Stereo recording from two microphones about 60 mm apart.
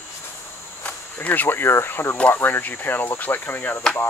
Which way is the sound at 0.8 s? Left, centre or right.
Left.